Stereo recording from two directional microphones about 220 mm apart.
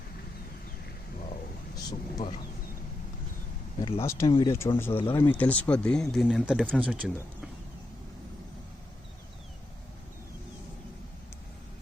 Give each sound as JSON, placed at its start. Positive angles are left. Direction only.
{"t": 1.7, "sound": "speech", "side_deg": 15}
{"t": 3.8, "sound": "speech", "side_deg": 25}
{"t": 4.0, "sound": "speech", "side_deg": 15}